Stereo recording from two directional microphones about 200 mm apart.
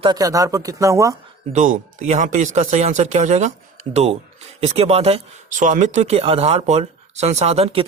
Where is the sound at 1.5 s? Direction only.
40° right (ahead or behind).